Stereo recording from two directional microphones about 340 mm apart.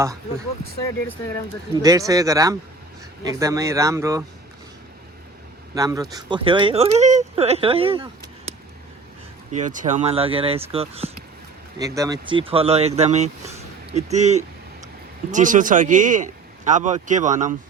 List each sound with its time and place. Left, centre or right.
1.7 s speech: centre
5.7 s a man's voice: centre